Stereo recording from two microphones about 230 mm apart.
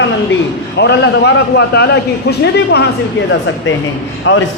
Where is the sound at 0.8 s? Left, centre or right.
Left.